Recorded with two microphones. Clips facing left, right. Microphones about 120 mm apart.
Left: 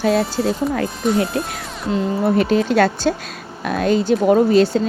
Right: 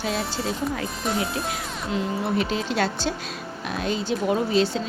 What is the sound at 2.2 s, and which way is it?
Speech, 50° left (ahead or behind).